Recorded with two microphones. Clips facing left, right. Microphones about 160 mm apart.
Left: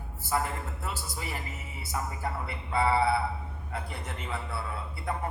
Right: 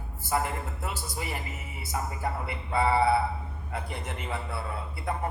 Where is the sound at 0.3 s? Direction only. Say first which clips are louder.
Right 1 dB; 20° right (ahead or behind).